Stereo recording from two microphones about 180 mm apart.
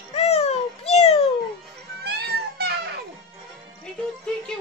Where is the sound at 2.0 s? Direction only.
60° right (ahead or behind).